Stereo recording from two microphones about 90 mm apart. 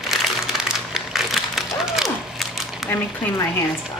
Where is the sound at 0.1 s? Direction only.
5° right (ahead or behind).